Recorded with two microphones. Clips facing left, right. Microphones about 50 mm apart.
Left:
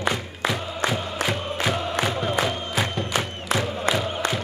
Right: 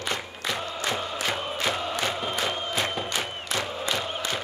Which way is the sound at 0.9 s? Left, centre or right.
Centre.